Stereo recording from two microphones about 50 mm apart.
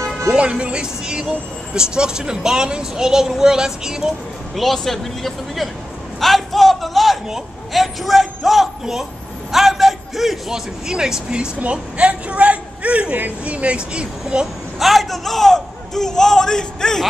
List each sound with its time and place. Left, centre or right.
0.3 s speech: centre
4.6 s a man's voice: centre
6.1 s a sound: centre
7.2 s a man's voice: centre
11.6 s a man's voice: right
14.8 s a man's voice: centre